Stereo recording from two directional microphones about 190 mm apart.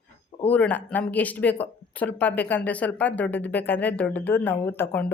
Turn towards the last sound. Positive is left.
turn(degrees=10)  # may be behind; listen again after turning